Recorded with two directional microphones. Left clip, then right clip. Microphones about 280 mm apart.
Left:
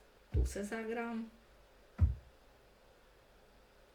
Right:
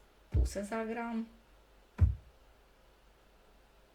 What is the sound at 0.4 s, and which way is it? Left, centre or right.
Speech, right.